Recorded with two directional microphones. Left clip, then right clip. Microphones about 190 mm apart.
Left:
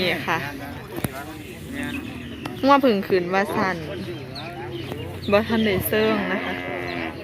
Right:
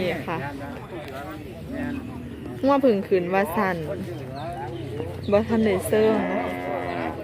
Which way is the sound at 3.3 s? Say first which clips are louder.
Left 1 dB; 20° right (ahead or behind).